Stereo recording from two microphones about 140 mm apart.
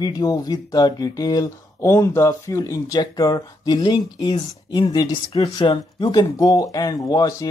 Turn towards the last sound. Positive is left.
turn(degrees=25)  # may be behind; listen again after turning